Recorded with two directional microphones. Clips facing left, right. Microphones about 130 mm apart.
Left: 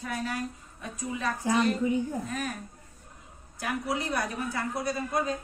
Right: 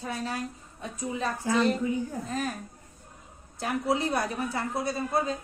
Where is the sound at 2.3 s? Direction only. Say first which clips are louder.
Right 2 dB; 30° right (ahead or behind).